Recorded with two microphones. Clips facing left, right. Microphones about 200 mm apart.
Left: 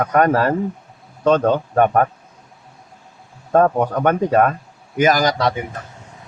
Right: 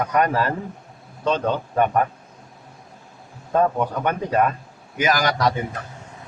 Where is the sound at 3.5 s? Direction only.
50° left (ahead or behind).